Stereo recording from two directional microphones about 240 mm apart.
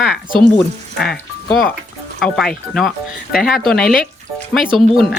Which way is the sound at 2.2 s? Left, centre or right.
Centre.